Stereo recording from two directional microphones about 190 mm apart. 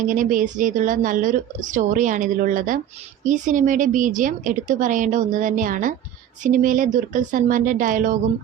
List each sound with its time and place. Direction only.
0.1 s a woman's voice: 45° right (ahead or behind)